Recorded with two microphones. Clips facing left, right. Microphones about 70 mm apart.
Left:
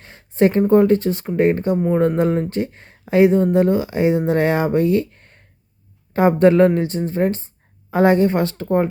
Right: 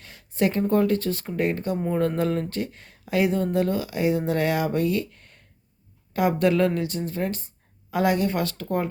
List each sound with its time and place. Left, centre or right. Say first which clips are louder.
0.0 s speech: left 8 dB; left